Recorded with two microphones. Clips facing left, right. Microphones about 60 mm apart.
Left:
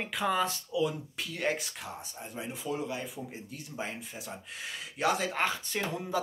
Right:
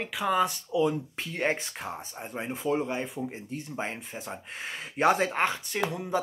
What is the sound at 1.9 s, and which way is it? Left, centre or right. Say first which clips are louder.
Speech: right 5 dB; right.